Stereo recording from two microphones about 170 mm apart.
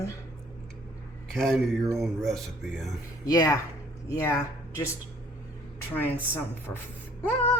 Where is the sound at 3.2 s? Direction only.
20° left (ahead or behind).